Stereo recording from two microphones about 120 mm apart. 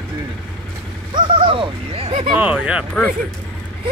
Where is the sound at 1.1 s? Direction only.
40° right (ahead or behind).